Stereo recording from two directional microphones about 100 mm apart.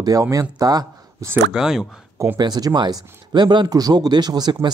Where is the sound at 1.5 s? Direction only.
5° right (ahead or behind).